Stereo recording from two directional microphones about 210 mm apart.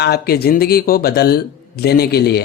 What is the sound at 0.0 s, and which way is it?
A man's voice, 50° left (ahead or behind).